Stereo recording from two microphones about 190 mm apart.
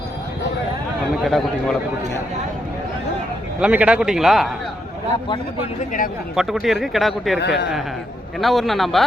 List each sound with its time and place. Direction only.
1.2 s speech: centre (ahead or behind)
3.6 s speech: 5° right (ahead or behind)
6.3 s speech: centre (ahead or behind)
7.3 s speech: 60° left (ahead or behind)
8.4 s speech: centre (ahead or behind)